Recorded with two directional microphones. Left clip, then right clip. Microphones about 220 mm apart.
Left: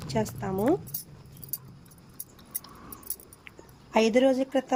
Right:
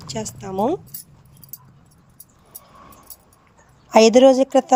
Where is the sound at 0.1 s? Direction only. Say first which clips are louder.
Even; 30° right (ahead or behind).